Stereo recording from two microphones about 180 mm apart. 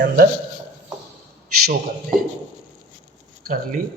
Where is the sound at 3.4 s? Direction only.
50° right (ahead or behind).